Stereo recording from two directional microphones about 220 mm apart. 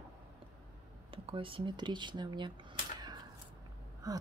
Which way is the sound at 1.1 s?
25° right (ahead or behind).